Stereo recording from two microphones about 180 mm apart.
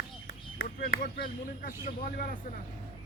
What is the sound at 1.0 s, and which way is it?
Speech, 55° left (ahead or behind).